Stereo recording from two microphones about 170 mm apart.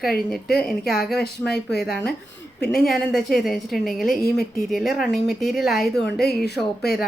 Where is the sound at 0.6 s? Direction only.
Centre (ahead or behind).